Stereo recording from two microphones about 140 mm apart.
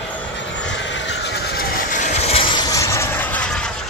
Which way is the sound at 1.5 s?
80° left.